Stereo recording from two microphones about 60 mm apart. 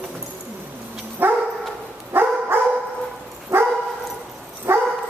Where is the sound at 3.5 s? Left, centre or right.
Right.